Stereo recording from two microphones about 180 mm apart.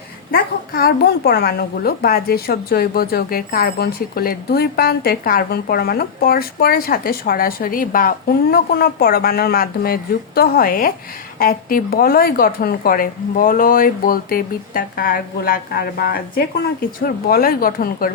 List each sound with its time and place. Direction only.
0.3 s a woman's voice: 55° left (ahead or behind)